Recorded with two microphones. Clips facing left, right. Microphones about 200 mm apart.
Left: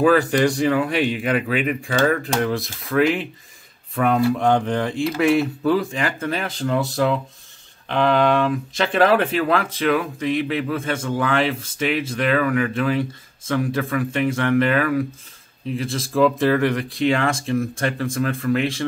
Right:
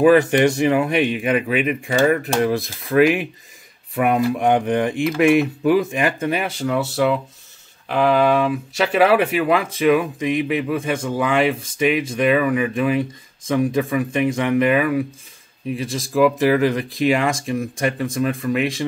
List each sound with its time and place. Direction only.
0.0 s speech: 20° right (ahead or behind)